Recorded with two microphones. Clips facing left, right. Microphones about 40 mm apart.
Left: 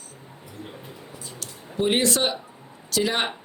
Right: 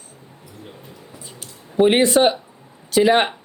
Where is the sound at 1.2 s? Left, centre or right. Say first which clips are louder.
Left 1 dB; centre.